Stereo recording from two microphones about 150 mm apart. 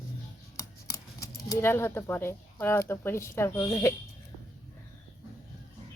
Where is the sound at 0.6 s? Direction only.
20° left (ahead or behind).